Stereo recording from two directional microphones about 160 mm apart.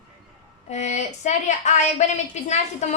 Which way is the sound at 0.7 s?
45° left (ahead or behind).